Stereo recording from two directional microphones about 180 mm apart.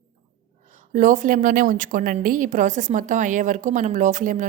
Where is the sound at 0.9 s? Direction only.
45° right (ahead or behind).